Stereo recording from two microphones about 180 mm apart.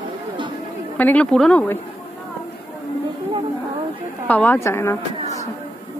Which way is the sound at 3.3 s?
30° right (ahead or behind).